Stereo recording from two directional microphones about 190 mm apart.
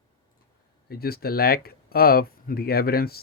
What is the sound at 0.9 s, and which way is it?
Speech, 55° left (ahead or behind).